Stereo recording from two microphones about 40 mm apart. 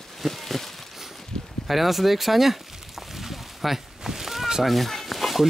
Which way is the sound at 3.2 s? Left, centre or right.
Centre.